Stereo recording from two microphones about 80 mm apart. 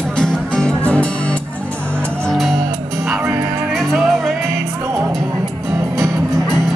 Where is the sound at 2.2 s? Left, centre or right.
Centre.